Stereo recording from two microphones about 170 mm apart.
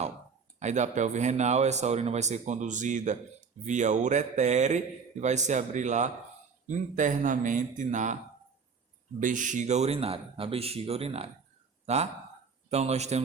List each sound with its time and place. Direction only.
0.6 s speech: 45° right (ahead or behind)
9.2 s speech: 50° right (ahead or behind)